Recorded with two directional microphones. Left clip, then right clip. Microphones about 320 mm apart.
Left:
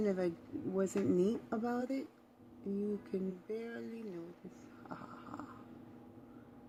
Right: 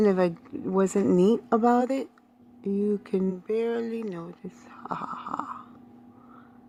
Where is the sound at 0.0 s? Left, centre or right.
Centre.